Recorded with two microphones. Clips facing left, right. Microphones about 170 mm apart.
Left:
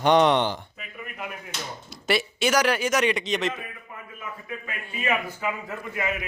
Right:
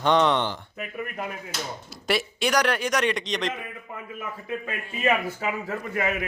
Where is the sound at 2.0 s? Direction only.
Centre (ahead or behind).